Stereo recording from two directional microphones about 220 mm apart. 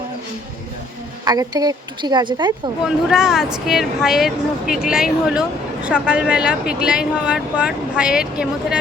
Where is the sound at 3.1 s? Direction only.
Centre (ahead or behind).